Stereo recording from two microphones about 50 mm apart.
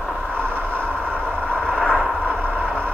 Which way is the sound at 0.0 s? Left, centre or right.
Centre.